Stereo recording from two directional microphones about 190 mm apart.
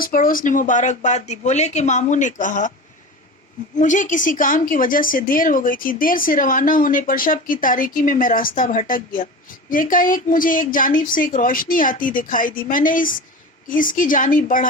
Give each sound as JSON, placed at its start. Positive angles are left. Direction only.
{"t": 0.0, "sound": "speech", "side_deg": 45}
{"t": 3.8, "sound": "a woman's voice", "side_deg": 40}